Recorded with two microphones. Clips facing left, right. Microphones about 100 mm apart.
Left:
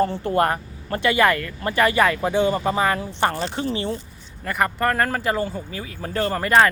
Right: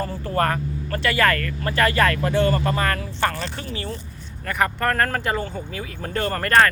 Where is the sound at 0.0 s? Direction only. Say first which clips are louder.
Left 3 dB; 25° left (ahead or behind).